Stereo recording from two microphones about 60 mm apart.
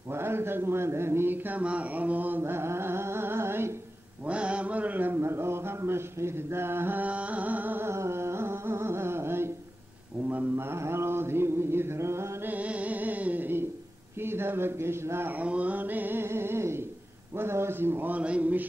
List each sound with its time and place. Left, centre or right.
0.1 s a man's voice: right
1.6 s music: right
4.3 s mantra: centre
5.2 s a sound: right
7.0 s music: right
7.9 s carnatic music: right
10.2 s mantra: right
10.5 s mantra: right
12.4 s music: right
14.2 s a sound: right
15.3 s a sound: right
18.2 s a sound: right